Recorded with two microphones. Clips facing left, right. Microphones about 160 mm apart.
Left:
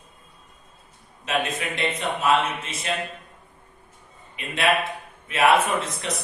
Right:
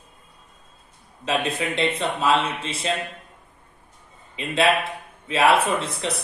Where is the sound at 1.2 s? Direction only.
30° right (ahead or behind).